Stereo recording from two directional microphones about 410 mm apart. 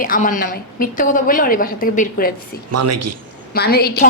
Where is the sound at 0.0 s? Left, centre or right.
Centre.